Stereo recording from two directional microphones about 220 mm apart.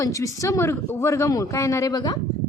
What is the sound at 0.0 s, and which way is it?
Speech, 15° left (ahead or behind).